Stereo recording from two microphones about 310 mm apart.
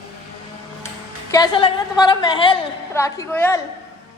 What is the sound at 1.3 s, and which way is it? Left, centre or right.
A woman's voice, centre.